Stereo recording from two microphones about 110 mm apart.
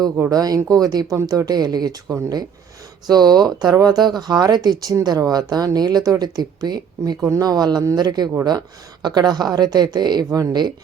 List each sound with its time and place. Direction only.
0.3 s speech: 35° right (ahead or behind)